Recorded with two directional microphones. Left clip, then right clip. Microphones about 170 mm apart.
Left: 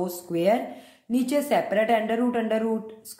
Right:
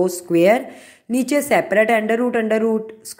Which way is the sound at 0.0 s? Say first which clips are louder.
Right 9 dB; 40° right (ahead or behind).